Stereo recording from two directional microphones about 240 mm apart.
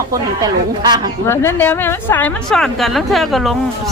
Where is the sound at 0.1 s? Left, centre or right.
Centre.